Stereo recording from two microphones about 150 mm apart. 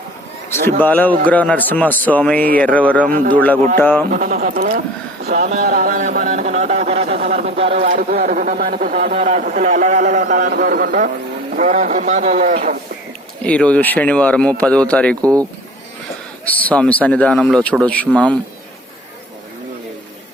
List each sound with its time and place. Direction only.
0.8 s speech: 10° left (ahead or behind)
4.1 s a man's voice: 60° right (ahead or behind)
5.6 s a sound: 65° right (ahead or behind); by 7.9 s 40° right (ahead or behind)
7.9 s a man's voice: 70° right (ahead or behind)
8.2 s a man's voice: 60° right (ahead or behind)
9.0 s a man's voice: 50° right (ahead or behind)
11.6 s a man's voice: 55° right (ahead or behind)
13.4 s speech: 5° left (ahead or behind)
15.2 s speech: 25° right (ahead or behind)
16.5 s speech: 10° left (ahead or behind)